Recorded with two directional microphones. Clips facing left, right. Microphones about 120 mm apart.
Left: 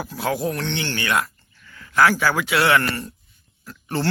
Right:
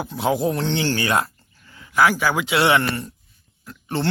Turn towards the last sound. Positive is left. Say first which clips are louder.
# even
turn(degrees=-20)  # may be behind; listen again after turning